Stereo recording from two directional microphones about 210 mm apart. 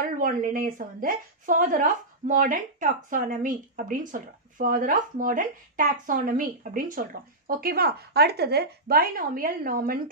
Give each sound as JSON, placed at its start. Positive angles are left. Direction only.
{"t": 0.0, "sound": "a woman's voice", "side_deg": -40}